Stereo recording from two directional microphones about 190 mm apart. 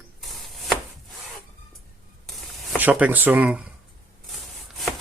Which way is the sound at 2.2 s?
Centre (ahead or behind).